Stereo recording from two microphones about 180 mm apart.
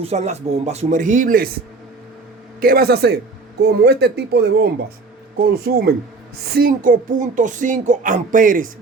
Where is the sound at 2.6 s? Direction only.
60° right (ahead or behind).